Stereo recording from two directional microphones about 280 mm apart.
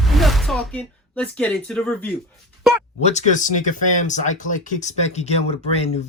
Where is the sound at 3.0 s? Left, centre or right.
Left.